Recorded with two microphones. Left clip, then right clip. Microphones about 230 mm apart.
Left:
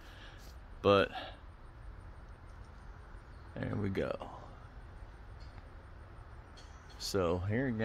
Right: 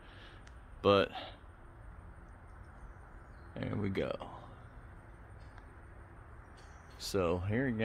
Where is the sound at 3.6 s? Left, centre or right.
Centre.